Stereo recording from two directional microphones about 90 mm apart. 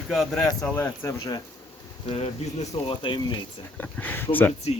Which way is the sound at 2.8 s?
65° left (ahead or behind).